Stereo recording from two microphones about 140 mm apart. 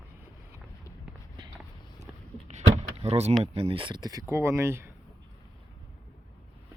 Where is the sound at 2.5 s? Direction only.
55° right (ahead or behind).